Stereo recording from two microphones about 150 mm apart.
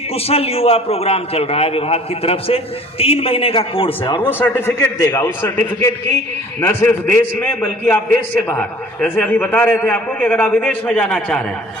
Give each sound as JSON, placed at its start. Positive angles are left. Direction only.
{"t": 0.1, "sound": "a man's voice", "side_deg": 40}
{"t": 4.3, "sound": "a man's voice", "side_deg": 15}